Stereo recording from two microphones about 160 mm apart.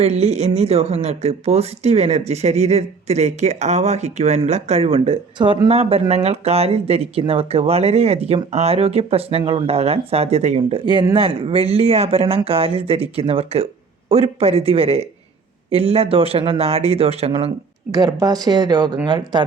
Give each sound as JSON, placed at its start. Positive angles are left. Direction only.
{"t": 0.0, "sound": "speech", "side_deg": -45}
{"t": 17.9, "sound": "speech", "side_deg": -25}